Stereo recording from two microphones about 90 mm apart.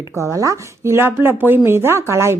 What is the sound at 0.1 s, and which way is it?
Speech, 30° right (ahead or behind).